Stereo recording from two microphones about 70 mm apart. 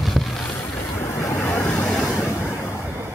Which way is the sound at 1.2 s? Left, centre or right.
Left.